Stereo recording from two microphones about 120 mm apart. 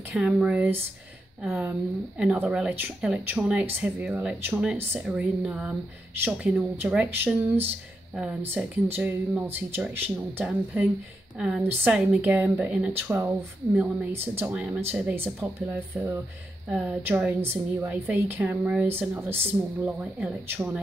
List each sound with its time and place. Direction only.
0.1 s a woman's voice: 10° right (ahead or behind)